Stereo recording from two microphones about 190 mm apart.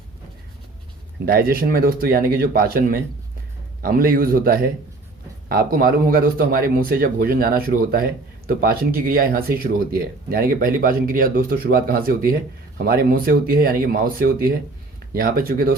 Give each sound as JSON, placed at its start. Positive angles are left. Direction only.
{"t": 1.2, "sound": "speech", "side_deg": -50}